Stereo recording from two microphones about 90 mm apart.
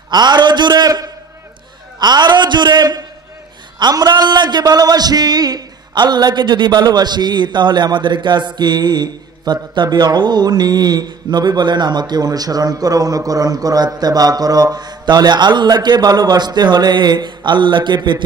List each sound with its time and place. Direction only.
0.1 s a man's voice: 55° right (ahead or behind)